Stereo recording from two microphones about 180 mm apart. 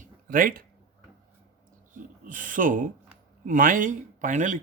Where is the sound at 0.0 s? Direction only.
50° right (ahead or behind).